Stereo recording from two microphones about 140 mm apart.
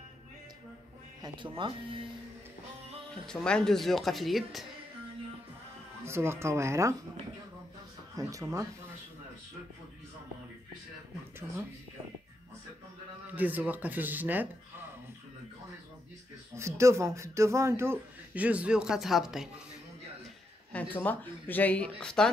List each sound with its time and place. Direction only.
1.2 s speech: 35° right (ahead or behind)
3.3 s speech: 5° left (ahead or behind)
6.0 s speech: 20° right (ahead or behind)
8.2 s speech: 25° right (ahead or behind)
13.3 s speech: 10° right (ahead or behind)
16.5 s speech: 20° right (ahead or behind); by 19.5 s 5° right (ahead or behind)
20.7 s speech: 10° left (ahead or behind)